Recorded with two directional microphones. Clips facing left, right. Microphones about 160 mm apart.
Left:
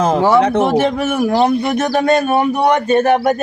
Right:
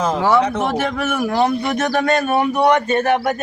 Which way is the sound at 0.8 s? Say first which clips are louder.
Left 5 dB; 30° left (ahead or behind).